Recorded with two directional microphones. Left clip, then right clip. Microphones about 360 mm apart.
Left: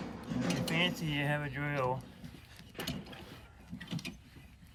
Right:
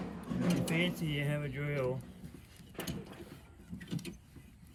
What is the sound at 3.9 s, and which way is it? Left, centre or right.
Vehicle, centre.